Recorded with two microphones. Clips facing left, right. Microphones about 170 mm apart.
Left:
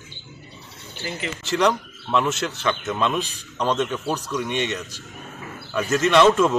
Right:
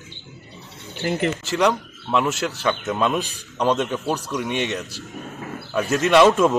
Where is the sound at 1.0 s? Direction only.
55° right (ahead or behind).